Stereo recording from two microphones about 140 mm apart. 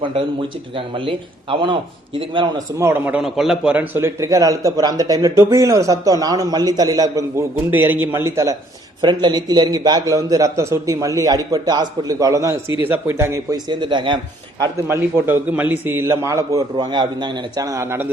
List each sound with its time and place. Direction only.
0.8 s a man's voice: 40° right (ahead or behind)
2.7 s a man's voice: 20° right (ahead or behind)
7.7 s a man's voice: 15° right (ahead or behind)
9.0 s a man's voice: 30° right (ahead or behind)
13.7 s a man's voice: 35° right (ahead or behind)
14.6 s a man's voice: 20° right (ahead or behind)